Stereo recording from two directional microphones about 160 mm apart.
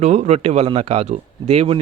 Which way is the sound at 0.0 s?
45° right (ahead or behind).